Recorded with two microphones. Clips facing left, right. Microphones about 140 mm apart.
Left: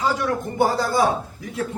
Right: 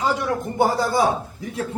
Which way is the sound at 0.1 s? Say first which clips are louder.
Even; 20° right (ahead or behind).